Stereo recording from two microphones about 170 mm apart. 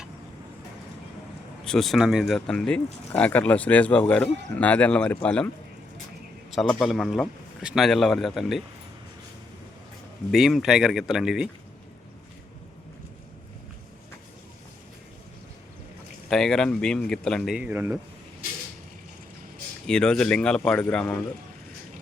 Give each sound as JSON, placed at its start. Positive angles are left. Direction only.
{"t": 1.6, "sound": "speech", "side_deg": 0}
{"t": 6.5, "sound": "a man's voice", "side_deg": 0}
{"t": 10.3, "sound": "a man's voice", "side_deg": 0}
{"t": 16.3, "sound": "a man's voice", "side_deg": 5}
{"t": 19.9, "sound": "a man's voice", "side_deg": 5}